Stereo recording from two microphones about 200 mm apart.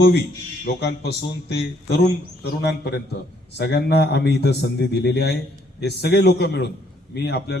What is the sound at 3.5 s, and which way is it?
A man's voice, 55° left (ahead or behind).